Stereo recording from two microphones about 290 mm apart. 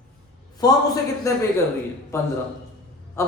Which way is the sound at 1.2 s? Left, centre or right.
Centre.